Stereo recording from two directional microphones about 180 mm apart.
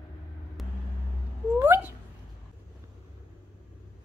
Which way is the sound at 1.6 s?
10° right (ahead or behind).